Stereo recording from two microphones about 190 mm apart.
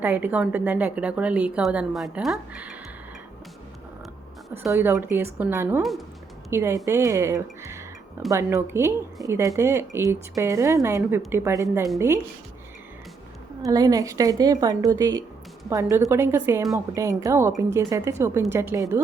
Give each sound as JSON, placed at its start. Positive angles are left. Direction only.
{"t": 0.0, "sound": "a woman's voice", "side_deg": -10}
{"t": 4.7, "sound": "a woman's voice", "side_deg": -10}
{"t": 5.8, "sound": "speech", "side_deg": 0}
{"t": 6.5, "sound": "a woman's voice", "side_deg": -15}
{"t": 13.7, "sound": "a woman's voice", "side_deg": -20}